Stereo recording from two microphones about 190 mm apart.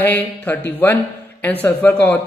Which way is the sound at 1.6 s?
10° left (ahead or behind).